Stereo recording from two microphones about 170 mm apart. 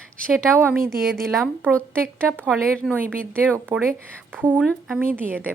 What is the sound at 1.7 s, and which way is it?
A woman's voice, 5° left (ahead or behind).